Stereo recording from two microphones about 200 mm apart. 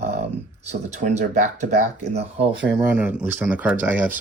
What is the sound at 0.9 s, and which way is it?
Speech, 35° right (ahead or behind).